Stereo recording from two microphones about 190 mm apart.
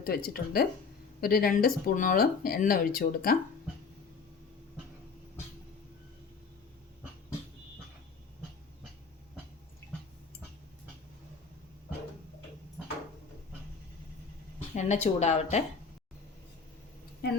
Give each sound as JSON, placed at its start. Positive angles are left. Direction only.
{"t": 0.0, "sound": "speech", "side_deg": 50}
{"t": 14.8, "sound": "speech", "side_deg": 35}